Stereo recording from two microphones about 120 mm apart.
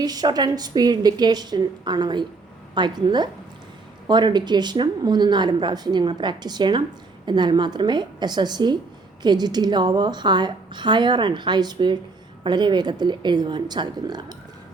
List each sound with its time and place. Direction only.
0.0 s a woman's voice: 35° right (ahead or behind)